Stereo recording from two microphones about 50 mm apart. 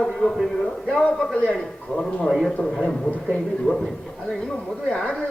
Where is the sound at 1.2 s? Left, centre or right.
Centre.